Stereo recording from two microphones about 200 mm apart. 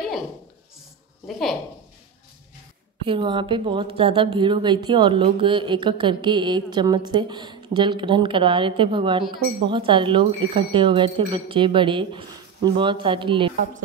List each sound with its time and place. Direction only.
1.2 s speech: centre (ahead or behind)
3.1 s speech: 25° right (ahead or behind)